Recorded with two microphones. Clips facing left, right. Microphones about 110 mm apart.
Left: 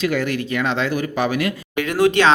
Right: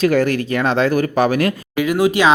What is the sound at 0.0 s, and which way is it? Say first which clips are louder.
Speech: right 6 dB; 40° right (ahead or behind).